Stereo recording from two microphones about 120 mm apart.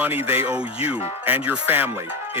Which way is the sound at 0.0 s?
15° right (ahead or behind).